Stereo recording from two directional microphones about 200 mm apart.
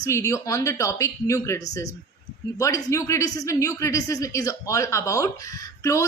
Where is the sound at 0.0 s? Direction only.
15° left (ahead or behind).